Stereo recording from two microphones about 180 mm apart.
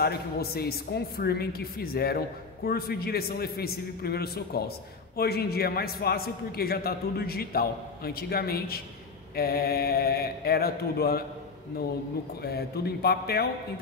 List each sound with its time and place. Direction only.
0.0 s a woman's voice: 60° left (ahead or behind)
12.4 s a woman's voice: 60° left (ahead or behind)